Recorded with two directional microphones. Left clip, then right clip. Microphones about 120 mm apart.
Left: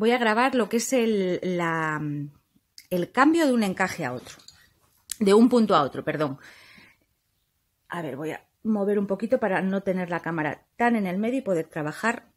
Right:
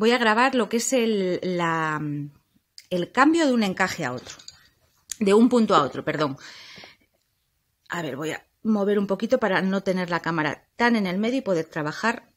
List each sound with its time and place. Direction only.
0.0 s a woman's voice: 5° right (ahead or behind)
5.0 s a woman's voice: 15° left (ahead or behind); by 6.7 s 10° right (ahead or behind)
7.8 s speech: 15° right (ahead or behind)